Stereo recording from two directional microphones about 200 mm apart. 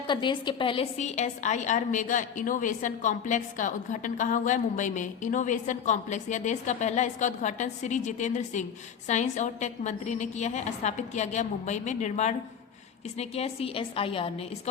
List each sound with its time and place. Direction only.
0.1 s a woman's voice: 25° left (ahead or behind)